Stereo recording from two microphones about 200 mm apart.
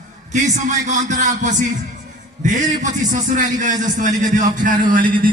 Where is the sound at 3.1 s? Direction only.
40° right (ahead or behind).